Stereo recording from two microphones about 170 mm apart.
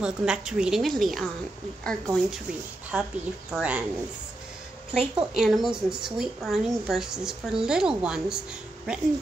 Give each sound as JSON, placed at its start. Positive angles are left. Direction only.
{"t": 0.0, "sound": "speech", "side_deg": -5}
{"t": 4.9, "sound": "speech", "side_deg": 0}